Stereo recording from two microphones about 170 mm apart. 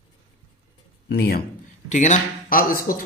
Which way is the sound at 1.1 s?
65° left (ahead or behind).